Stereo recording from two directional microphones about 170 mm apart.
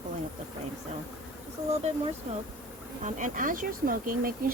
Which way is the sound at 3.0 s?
50° right (ahead or behind).